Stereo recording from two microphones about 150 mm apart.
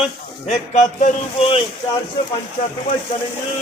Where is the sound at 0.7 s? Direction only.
55° left (ahead or behind).